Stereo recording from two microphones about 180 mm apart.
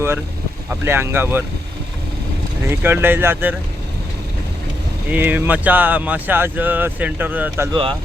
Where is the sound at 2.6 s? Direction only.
10° right (ahead or behind).